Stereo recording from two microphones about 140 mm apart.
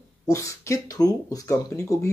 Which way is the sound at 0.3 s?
20° left (ahead or behind).